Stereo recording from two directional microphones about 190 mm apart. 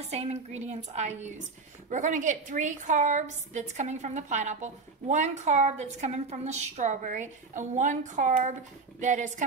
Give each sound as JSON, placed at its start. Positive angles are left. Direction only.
{"t": 0.1, "sound": "a woman's voice", "side_deg": -35}